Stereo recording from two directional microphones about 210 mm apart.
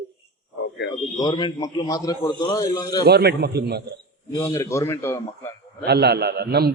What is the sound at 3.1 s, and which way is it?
Speech, 50° right (ahead or behind).